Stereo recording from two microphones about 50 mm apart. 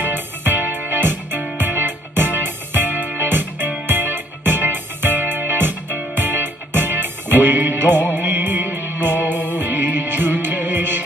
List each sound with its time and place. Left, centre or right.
0.0 s music: right